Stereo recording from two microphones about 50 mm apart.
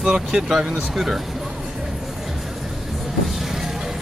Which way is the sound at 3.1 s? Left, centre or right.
Centre.